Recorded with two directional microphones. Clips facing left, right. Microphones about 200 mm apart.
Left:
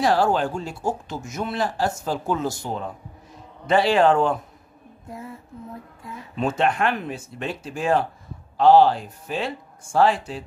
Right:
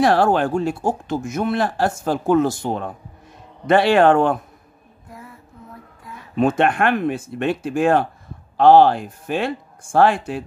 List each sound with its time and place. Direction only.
0.0 s speech: 60° right (ahead or behind)
5.0 s a sound: 25° left (ahead or behind)
6.3 s speech: 55° right (ahead or behind)